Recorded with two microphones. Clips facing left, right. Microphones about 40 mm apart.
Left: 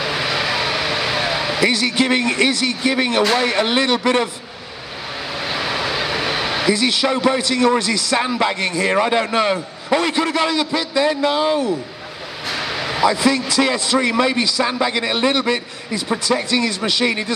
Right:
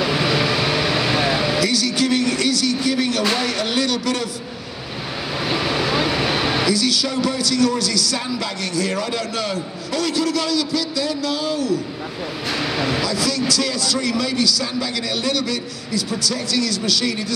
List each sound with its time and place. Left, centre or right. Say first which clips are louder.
0.0 s vehicle: right 2 dB; centre
1.6 s a man's voice: left 2 dB; left
5.4 s vehicle: right 1 dB; centre
6.7 s a man's voice: left 3 dB; left
12.4 s a sound: right 1 dB; centre
13.0 s a man's voice: left 5 dB; left